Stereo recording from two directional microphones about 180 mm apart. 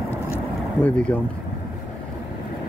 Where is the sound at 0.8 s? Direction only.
10° left (ahead or behind).